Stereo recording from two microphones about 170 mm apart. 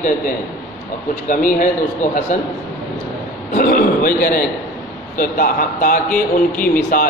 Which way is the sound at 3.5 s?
60° left (ahead or behind).